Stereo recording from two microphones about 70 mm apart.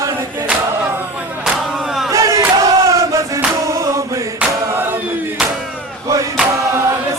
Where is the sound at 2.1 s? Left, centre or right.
Right.